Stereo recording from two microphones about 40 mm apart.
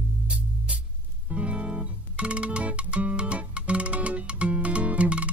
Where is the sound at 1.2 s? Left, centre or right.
Right.